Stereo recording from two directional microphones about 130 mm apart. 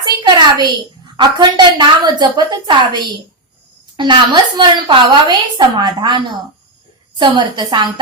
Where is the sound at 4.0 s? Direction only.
35° right (ahead or behind).